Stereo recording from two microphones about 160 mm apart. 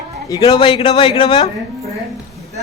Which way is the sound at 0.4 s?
30° left (ahead or behind).